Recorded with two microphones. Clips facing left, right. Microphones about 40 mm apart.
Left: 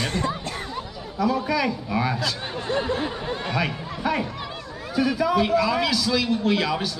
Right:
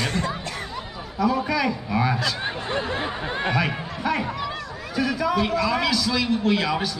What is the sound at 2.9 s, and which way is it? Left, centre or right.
Speech, right.